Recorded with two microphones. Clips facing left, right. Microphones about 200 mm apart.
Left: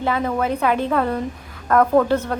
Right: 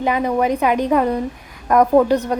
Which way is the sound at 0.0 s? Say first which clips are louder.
Right 3 dB; 15° right (ahead or behind).